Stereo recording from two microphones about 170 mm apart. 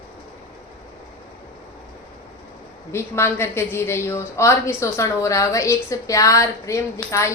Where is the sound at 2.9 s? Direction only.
15° left (ahead or behind).